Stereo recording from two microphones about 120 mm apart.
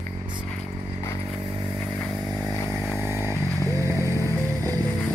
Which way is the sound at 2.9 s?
25° right (ahead or behind).